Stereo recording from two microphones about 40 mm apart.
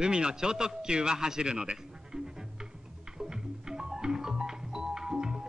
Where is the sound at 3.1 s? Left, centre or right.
Centre.